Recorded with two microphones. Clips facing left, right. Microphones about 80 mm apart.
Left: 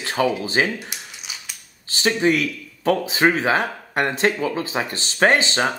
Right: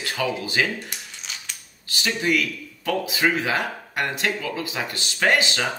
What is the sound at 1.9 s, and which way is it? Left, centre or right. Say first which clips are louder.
Speech: left 4 dB; left.